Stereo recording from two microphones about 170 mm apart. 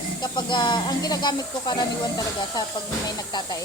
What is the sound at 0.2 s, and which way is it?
Speech, 25° left (ahead or behind).